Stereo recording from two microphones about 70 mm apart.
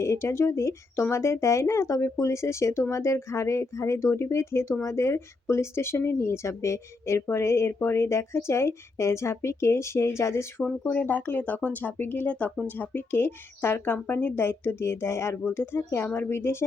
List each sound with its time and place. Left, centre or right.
0.0 s speech: left
10.6 s speech: centre; by 16.6 s left